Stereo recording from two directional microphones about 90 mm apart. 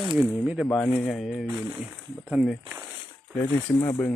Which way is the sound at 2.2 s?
5° right (ahead or behind).